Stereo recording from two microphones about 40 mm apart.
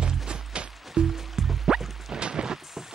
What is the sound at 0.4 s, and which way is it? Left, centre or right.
Music, centre.